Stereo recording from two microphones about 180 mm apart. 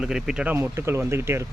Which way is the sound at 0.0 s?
5° right (ahead or behind).